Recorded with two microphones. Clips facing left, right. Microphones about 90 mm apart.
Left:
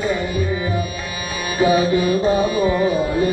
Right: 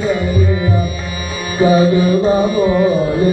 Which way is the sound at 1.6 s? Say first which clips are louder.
Right 5 dB; 30° right (ahead or behind).